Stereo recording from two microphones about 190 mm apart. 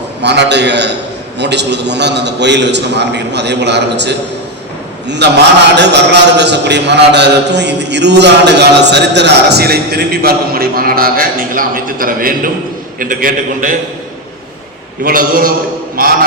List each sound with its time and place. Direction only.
0.2 s a man's voice: 65° right (ahead or behind); by 13.7 s 45° right (ahead or behind)
15.0 s a man's voice: 50° right (ahead or behind)